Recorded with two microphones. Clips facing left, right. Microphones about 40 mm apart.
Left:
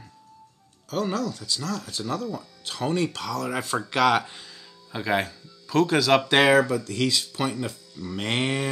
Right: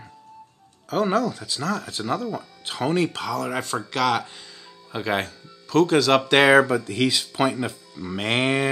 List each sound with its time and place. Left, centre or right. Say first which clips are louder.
0.8 s speech: right 5 dB; right
1.8 s speech: right 3 dB; centre
4.9 s speech: even; centre
6.7 s speech: right 3 dB; right
8.2 s speech: right 4 dB; centre